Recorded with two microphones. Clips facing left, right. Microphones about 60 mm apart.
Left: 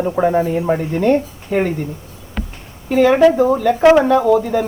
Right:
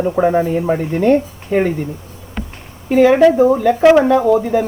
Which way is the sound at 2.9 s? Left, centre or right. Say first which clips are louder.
Right 2 dB; centre.